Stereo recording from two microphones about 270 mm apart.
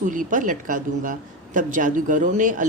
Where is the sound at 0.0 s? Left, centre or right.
Right.